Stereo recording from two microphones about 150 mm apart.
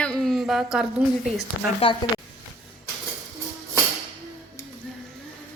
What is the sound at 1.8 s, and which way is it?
Speech, 40° left (ahead or behind).